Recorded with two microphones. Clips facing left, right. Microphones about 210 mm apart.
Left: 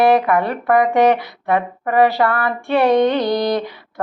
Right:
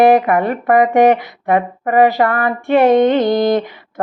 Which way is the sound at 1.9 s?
45° right (ahead or behind).